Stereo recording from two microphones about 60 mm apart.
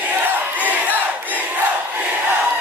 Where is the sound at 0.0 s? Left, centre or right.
Right.